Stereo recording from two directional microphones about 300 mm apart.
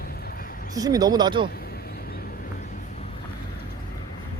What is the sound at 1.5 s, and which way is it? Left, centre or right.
Vehicle, left.